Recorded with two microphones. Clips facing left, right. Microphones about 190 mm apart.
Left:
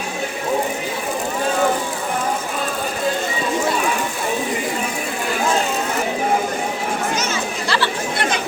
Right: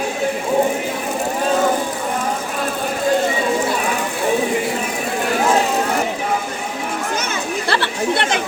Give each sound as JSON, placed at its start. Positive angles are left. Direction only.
{"t": 7.7, "sound": "chatter", "side_deg": -55}